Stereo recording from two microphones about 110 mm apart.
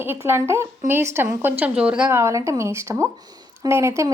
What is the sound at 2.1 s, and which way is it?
A woman's voice, 25° right (ahead or behind).